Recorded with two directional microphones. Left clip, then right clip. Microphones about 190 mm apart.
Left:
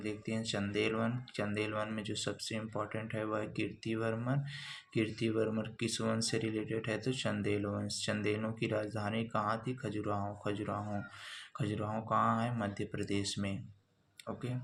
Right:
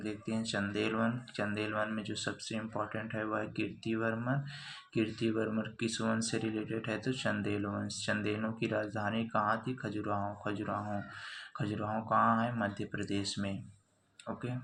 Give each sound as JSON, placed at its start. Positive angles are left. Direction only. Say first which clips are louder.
{"t": 0.0, "sound": "speech", "louder": "right 1 dB", "side_deg": 20}